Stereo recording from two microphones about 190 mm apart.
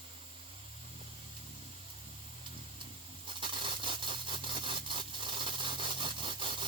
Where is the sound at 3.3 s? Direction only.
25° right (ahead or behind).